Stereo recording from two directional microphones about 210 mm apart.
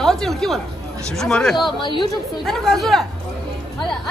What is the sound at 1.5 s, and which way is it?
Speech, 20° left (ahead or behind).